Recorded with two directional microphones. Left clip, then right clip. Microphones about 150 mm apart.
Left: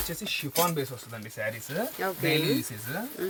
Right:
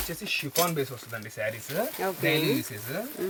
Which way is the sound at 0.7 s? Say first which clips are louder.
Right 2 dB; centre (ahead or behind).